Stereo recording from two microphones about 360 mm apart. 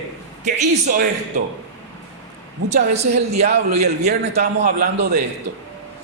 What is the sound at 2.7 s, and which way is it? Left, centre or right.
A woman's voice, centre.